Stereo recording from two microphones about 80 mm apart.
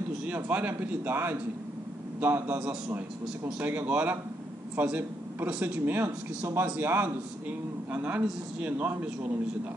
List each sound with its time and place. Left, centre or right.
0.2 s a man's voice: centre
3.6 s a man's voice: right